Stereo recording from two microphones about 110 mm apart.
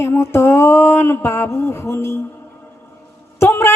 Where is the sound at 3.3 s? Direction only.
25° left (ahead or behind).